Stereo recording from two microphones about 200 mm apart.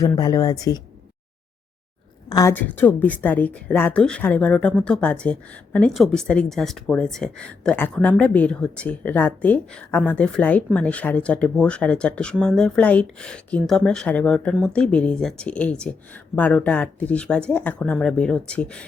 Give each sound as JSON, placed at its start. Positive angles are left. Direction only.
{"t": 0.0, "sound": "speech", "side_deg": 20}
{"t": 2.3, "sound": "speech", "side_deg": 15}